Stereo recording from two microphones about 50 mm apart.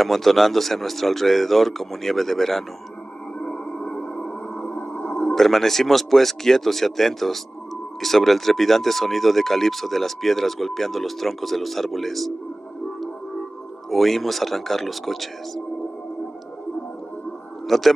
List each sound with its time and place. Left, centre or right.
0.0 s speech: centre
3.3 s music: left
4.9 s a sound: left
5.2 s speech: centre
13.8 s speech: centre
17.6 s speech: centre